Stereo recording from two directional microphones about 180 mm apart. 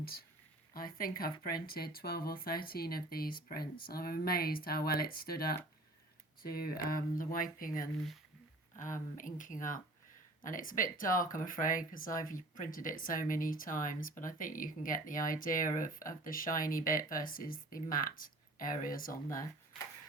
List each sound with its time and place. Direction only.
0.0 s speech: 55° left (ahead or behind)